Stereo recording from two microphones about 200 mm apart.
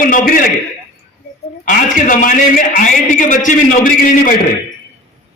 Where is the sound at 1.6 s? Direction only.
40° left (ahead or behind).